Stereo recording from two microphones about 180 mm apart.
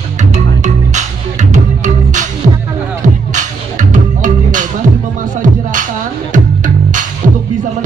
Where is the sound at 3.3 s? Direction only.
45° right (ahead or behind).